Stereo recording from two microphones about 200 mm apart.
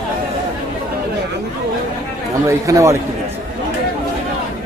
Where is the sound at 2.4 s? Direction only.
15° right (ahead or behind).